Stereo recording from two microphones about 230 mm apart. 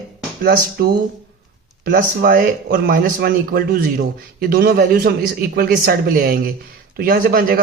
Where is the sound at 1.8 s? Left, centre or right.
Right.